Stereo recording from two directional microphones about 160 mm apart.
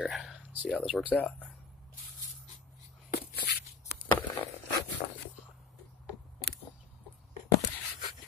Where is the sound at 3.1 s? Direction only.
85° left.